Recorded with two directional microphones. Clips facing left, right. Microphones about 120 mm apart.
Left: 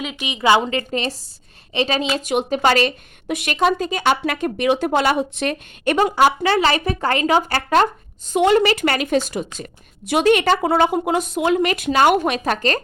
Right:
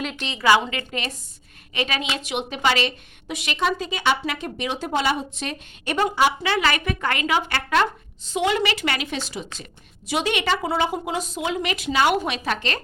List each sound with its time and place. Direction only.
0.0 s a woman's voice: 5° left (ahead or behind)
0.3 s a woman's voice: 20° left (ahead or behind)
0.6 s a woman's voice: 35° left (ahead or behind)